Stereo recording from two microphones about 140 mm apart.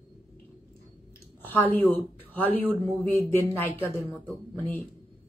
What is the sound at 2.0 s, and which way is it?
Speech, 15° left (ahead or behind).